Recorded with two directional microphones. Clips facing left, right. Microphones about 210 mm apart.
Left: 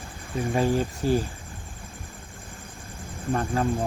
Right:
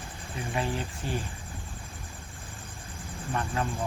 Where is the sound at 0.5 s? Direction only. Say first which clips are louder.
Left 8 dB; 40° left (ahead or behind).